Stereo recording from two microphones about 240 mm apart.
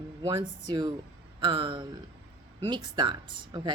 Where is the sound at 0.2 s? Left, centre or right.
Right.